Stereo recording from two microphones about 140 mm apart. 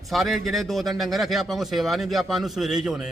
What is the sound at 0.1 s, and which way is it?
A man's voice, centre (ahead or behind).